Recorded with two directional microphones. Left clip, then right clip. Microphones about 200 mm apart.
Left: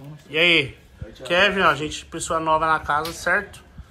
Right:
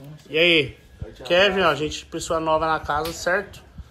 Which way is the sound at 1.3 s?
15° left (ahead or behind).